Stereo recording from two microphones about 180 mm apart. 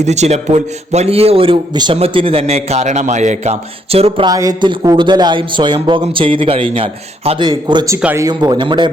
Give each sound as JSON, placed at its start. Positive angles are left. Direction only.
{"t": 0.0, "sound": "a man's voice", "side_deg": -40}
{"t": 4.3, "sound": "a man's voice", "side_deg": -20}
{"t": 7.9, "sound": "a man's voice", "side_deg": -10}